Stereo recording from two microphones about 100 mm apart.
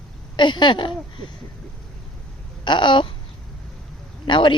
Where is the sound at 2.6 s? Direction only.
50° left (ahead or behind).